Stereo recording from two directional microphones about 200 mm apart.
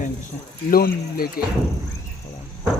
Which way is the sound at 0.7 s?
45° left (ahead or behind).